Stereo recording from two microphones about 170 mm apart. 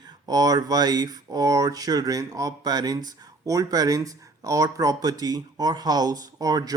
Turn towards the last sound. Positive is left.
turn(degrees=-20)  # may be behind; listen again after turning